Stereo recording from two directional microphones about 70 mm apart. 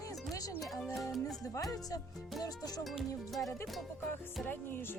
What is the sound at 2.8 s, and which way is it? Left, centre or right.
Speech, centre.